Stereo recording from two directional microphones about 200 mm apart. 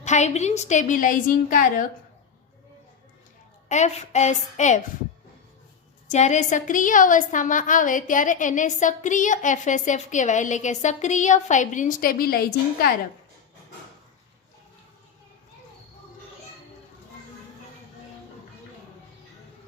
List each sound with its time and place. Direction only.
0.0 s a woman's voice: 35° left (ahead or behind)
3.7 s a woman's voice: 35° left (ahead or behind)
6.1 s a woman's voice: 35° left (ahead or behind)